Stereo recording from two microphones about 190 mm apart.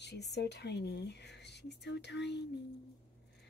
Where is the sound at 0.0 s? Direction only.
60° left (ahead or behind).